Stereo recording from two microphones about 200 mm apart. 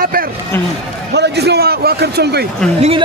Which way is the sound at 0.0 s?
45° right (ahead or behind).